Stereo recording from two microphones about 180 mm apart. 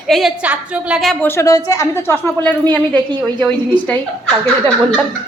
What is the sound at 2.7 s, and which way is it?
Speech, 25° right (ahead or behind).